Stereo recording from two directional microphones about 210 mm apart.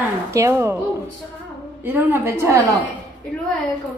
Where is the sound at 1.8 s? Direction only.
10° right (ahead or behind).